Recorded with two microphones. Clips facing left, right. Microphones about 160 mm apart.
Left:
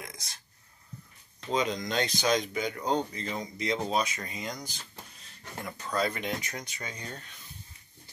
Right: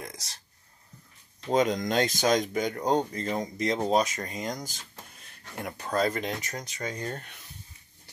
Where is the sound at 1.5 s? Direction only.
45° right (ahead or behind).